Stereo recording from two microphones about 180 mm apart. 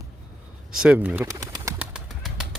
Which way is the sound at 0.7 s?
5° right (ahead or behind).